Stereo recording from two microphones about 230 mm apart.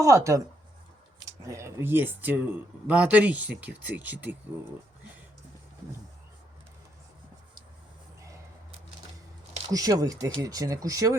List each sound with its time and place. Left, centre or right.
0.0 s speech: centre
1.5 s speech: centre
9.7 s speech: centre